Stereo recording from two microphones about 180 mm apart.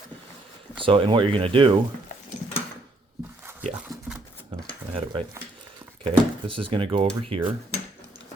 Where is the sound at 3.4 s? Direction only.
10° right (ahead or behind).